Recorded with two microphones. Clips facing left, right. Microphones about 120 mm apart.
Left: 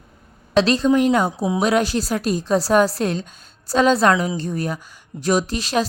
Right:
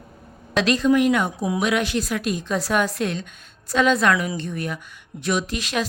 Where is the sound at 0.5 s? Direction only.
30° left (ahead or behind).